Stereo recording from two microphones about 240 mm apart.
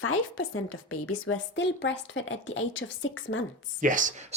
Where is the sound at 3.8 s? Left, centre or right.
Right.